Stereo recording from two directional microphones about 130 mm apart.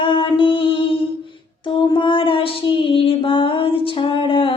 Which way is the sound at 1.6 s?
40° left (ahead or behind).